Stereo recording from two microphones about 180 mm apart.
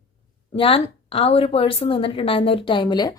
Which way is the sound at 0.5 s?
30° left (ahead or behind).